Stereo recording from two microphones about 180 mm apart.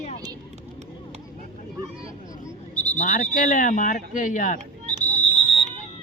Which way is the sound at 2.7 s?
5° left (ahead or behind).